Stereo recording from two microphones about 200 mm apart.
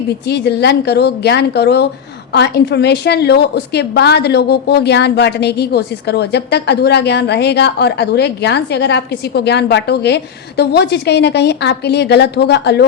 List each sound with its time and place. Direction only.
0.3 s a woman's voice: 55° left (ahead or behind)